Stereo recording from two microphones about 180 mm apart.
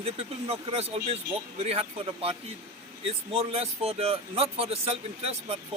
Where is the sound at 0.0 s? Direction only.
35° right (ahead or behind).